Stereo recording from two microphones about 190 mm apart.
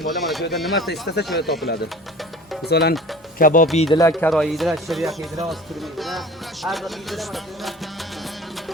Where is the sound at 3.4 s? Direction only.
45° left (ahead or behind).